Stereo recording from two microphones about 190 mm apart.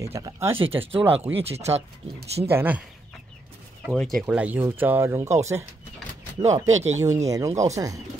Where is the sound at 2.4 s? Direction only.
10° right (ahead or behind).